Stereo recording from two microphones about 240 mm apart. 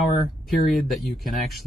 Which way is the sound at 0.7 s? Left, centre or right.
Centre.